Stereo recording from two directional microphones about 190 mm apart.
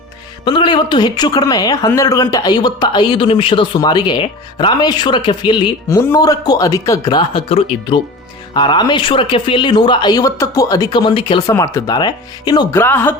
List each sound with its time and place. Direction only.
0.4 s a man's voice: 25° left (ahead or behind)
12.8 s speech: 10° left (ahead or behind)